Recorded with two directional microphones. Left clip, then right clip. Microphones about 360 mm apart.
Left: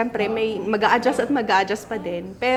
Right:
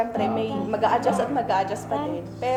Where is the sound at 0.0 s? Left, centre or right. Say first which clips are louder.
Left 2 dB; left.